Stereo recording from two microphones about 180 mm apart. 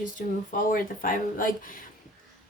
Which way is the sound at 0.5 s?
50° left (ahead or behind).